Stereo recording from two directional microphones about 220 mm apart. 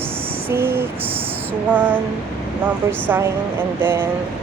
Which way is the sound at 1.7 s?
10° right (ahead or behind).